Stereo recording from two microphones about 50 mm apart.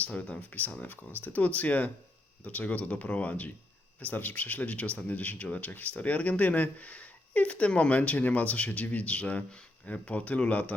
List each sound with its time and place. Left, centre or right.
0.0 s speech: left